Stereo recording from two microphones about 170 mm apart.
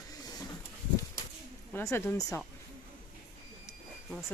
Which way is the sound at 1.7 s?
15° left (ahead or behind).